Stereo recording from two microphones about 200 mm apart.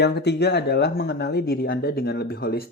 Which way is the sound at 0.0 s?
55° left (ahead or behind).